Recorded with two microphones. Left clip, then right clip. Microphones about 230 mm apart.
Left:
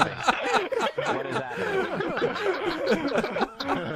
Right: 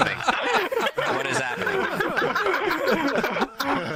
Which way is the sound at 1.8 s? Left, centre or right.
Right.